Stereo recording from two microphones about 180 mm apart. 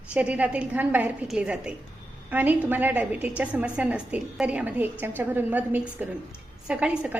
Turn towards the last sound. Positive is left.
turn(degrees=-5)  # may be behind; listen again after turning